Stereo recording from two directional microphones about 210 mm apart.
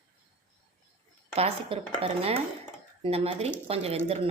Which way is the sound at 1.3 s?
30° right (ahead or behind).